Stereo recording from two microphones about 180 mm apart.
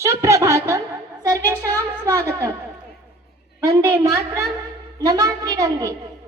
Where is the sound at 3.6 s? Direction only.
15° right (ahead or behind).